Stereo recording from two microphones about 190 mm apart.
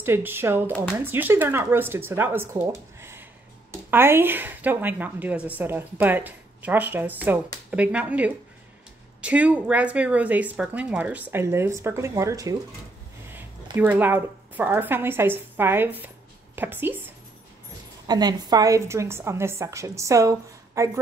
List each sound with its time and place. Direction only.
0.0 s a woman's voice: 10° right (ahead or behind)
2.6 s a sound: 15° right (ahead or behind)
3.9 s a woman's voice: 10° right (ahead or behind)
13.7 s a woman's voice: 10° right (ahead or behind)